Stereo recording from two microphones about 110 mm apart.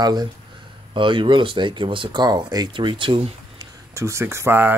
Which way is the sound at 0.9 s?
50° right (ahead or behind).